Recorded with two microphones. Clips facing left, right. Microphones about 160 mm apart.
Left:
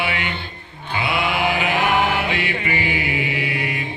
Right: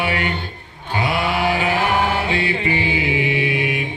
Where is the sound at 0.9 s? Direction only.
40° right (ahead or behind).